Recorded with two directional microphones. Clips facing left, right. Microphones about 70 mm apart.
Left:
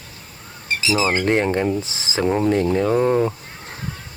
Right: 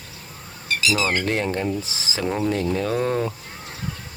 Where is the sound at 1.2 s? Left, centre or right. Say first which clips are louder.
Left 5 dB; left.